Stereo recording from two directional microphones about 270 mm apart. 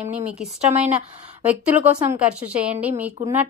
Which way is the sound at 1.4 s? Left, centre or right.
Centre.